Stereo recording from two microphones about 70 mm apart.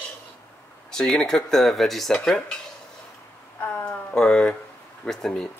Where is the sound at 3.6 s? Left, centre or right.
Left.